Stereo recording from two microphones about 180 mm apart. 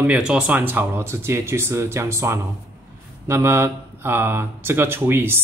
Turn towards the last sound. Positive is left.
turn(degrees=-15)  # may be behind; listen again after turning